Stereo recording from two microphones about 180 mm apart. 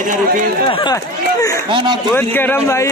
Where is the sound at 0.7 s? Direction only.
25° left (ahead or behind).